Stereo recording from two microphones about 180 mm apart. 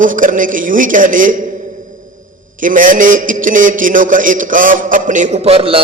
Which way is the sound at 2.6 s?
50° right (ahead or behind).